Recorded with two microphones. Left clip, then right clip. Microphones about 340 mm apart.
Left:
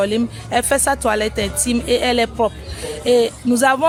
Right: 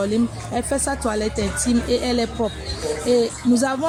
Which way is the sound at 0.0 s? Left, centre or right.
Left.